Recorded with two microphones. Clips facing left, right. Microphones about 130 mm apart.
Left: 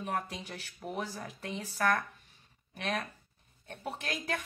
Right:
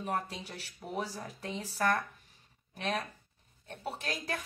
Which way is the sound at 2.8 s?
35° right (ahead or behind).